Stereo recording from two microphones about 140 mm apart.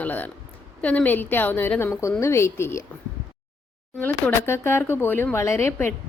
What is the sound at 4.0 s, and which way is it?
Speech, 15° left (ahead or behind).